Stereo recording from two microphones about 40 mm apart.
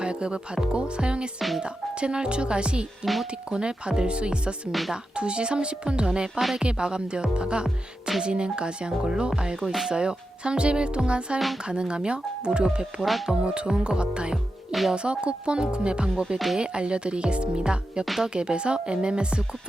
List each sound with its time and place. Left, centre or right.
0.0 s speech: right
1.4 s speech: centre
1.6 s speech: right
13.0 s speech: centre
13.4 s speech: right
14.7 s speech: centre
14.9 s speech: right
18.0 s speech: centre
18.3 s speech: right